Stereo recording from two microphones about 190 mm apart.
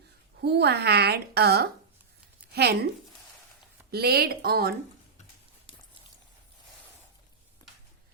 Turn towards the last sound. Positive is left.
turn(degrees=20)  # may be behind; listen again after turning